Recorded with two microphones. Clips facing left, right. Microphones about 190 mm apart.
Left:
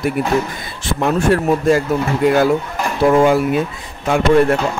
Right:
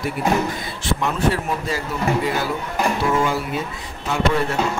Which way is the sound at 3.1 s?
55° left (ahead or behind).